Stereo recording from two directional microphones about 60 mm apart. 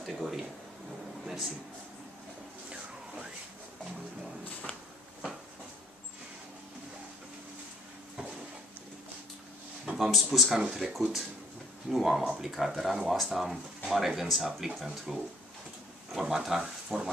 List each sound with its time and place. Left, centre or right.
0.0 s speech: centre
1.2 s a sound: centre
9.9 s speech: centre
15.1 s speech: centre